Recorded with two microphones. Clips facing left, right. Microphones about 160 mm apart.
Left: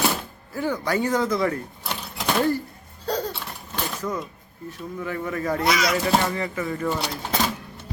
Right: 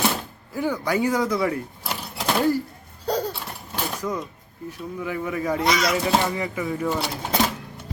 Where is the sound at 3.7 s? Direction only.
10° right (ahead or behind).